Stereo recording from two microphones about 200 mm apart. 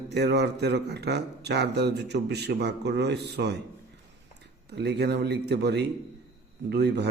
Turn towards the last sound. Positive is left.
turn(degrees=-55)  # may be behind; listen again after turning